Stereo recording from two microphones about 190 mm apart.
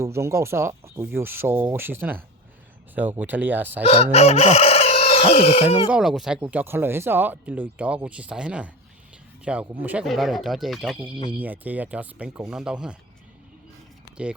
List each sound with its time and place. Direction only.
0.0 s speech: 15° right (ahead or behind)
3.8 s speech: 35° left (ahead or behind)
5.9 s speech: centre (ahead or behind)